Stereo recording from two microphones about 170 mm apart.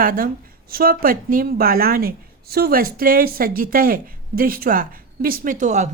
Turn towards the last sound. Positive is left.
turn(degrees=-45)  # may be behind; listen again after turning